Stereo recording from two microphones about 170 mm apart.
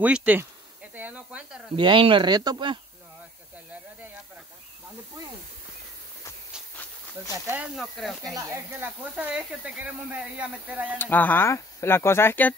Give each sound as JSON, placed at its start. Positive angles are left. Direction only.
{"t": 0.0, "sound": "speech", "side_deg": -10}
{"t": 0.9, "sound": "snake", "side_deg": -10}
{"t": 1.8, "sound": "speech", "side_deg": -30}
{"t": 7.7, "sound": "speech", "side_deg": 0}
{"t": 8.4, "sound": "speech", "side_deg": -15}
{"t": 11.0, "sound": "speech", "side_deg": 10}